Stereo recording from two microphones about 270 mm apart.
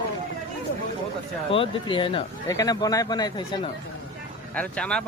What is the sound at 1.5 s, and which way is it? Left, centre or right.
Speech, centre.